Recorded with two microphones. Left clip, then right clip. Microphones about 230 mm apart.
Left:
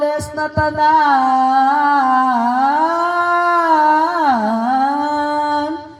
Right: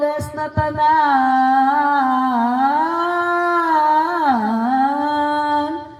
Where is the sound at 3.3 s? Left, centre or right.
Left.